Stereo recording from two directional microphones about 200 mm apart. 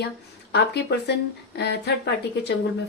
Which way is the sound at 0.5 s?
55° left (ahead or behind).